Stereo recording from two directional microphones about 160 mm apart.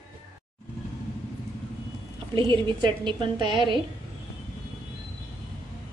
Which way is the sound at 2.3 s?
30° right (ahead or behind).